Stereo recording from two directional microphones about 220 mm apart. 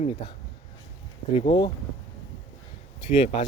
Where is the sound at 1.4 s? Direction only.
20° left (ahead or behind).